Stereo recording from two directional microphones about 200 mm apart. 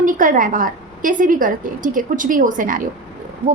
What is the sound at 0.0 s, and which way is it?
A woman's voice, 40° right (ahead or behind).